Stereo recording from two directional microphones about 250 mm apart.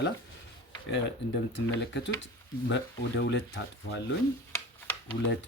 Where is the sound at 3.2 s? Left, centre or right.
Left.